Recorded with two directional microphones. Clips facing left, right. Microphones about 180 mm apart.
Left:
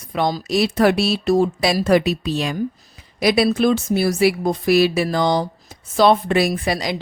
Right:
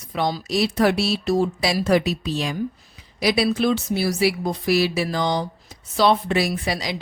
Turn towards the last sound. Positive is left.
turn(degrees=50)  # may be behind; listen again after turning